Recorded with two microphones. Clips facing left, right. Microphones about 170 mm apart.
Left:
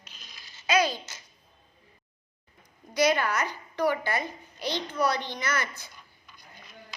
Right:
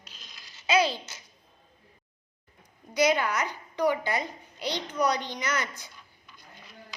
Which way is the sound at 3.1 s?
10° right (ahead or behind).